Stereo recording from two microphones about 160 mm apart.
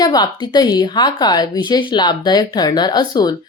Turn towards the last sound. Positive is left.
turn(degrees=25)  # may be behind; listen again after turning